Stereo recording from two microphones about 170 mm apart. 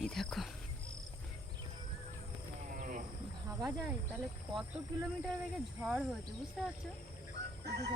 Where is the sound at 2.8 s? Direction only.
55° right (ahead or behind).